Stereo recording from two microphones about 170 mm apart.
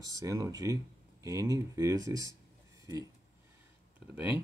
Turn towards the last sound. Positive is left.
turn(degrees=-10)  # may be behind; listen again after turning